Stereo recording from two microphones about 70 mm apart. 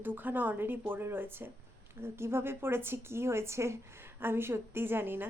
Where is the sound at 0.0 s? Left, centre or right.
Right.